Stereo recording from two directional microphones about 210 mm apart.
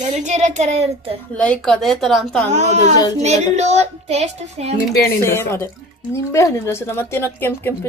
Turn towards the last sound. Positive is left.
turn(degrees=10)  # may be behind; listen again after turning